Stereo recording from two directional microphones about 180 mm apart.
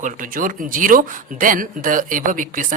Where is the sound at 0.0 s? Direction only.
45° right (ahead or behind).